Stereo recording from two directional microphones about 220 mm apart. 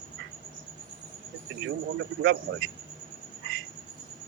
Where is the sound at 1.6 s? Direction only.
60° right (ahead or behind).